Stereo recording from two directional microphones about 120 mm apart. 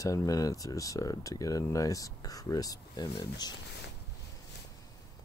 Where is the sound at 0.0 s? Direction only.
25° left (ahead or behind).